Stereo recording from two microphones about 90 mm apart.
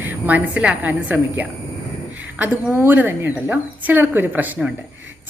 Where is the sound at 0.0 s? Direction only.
20° right (ahead or behind).